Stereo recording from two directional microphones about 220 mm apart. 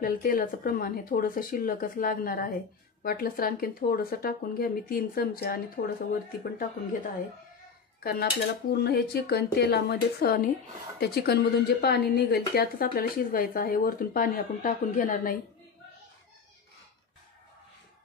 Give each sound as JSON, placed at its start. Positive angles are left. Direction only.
{"t": 0.0, "sound": "speech", "side_deg": 40}
{"t": 8.0, "sound": "dishes", "side_deg": 45}
{"t": 8.7, "sound": "speech", "side_deg": 45}